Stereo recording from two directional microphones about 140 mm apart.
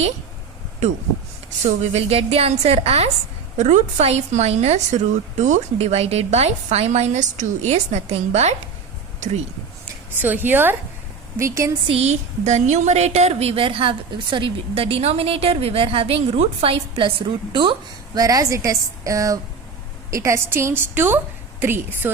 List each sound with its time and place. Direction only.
1.5 s a woman's voice: 55° right (ahead or behind)
10.2 s a woman's voice: 15° right (ahead or behind)
11.9 s a woman's voice: 50° right (ahead or behind); by 22.1 s 15° right (ahead or behind)